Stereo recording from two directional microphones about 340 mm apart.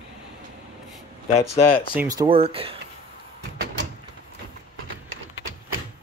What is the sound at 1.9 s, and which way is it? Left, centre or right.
Speech, centre.